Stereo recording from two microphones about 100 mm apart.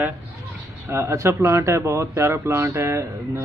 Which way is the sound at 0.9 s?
30° right (ahead or behind).